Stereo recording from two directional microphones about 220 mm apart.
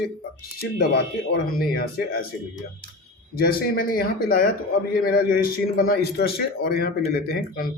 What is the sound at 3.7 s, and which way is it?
A man's voice, 40° left (ahead or behind).